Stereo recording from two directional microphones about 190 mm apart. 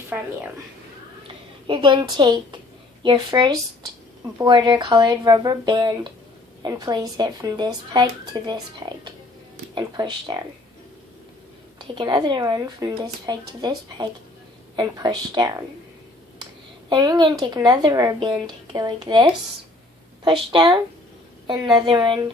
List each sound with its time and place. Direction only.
0.1 s a woman's voice: 10° right (ahead or behind)
1.3 s a woman's voice: 25° right (ahead or behind)
9.7 s a woman's voice: 25° right (ahead or behind)
11.8 s a woman's voice: 25° right (ahead or behind)
16.9 s a woman's voice: 20° right (ahead or behind)